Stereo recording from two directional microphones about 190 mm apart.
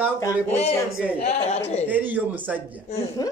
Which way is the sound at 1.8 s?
10° right (ahead or behind).